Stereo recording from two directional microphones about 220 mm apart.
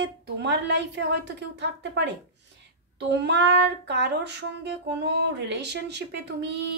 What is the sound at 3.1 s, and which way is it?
Child singing, 50° right (ahead or behind).